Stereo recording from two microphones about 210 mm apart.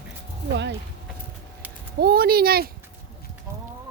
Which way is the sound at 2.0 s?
45° right (ahead or behind).